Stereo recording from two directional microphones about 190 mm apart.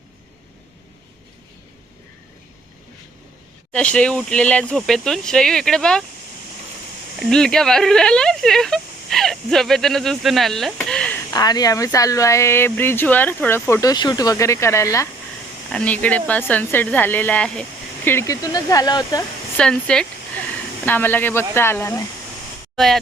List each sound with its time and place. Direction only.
3.7 s speech: 5° left (ahead or behind)
7.2 s speech: 5° left (ahead or behind)
11.3 s speech: 20° left (ahead or behind)
19.5 s speech: 5° left (ahead or behind)
22.7 s speech: centre (ahead or behind)